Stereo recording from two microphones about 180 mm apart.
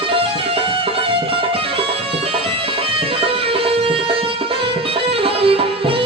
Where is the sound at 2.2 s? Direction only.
30° right (ahead or behind).